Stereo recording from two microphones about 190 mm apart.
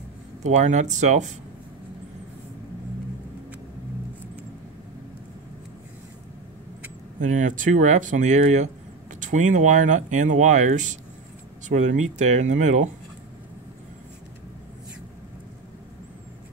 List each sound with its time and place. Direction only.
0.4 s speech: 40° right (ahead or behind)
7.2 s speech: 40° right (ahead or behind)